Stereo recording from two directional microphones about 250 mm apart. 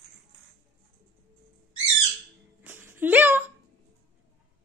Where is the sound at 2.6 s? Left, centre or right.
Centre.